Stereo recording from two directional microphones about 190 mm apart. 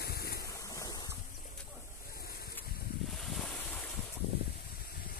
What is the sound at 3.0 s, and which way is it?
Ocean, centre (ahead or behind).